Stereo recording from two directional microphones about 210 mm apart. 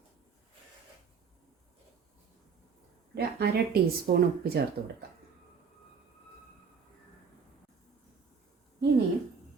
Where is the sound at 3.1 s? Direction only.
50° right (ahead or behind).